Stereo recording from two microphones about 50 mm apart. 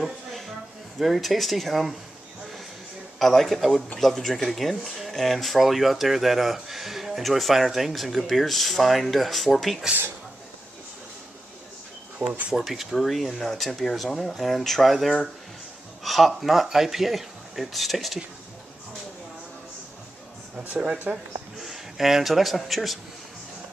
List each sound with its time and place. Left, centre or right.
0.0 s a sound: centre
0.9 s speech: centre
3.2 s speech: centre
12.2 s speech: right
12.5 s speech: centre
20.5 s speech: right
21.6 s speech: centre